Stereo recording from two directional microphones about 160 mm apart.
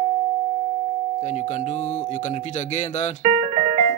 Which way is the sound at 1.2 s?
50° left (ahead or behind).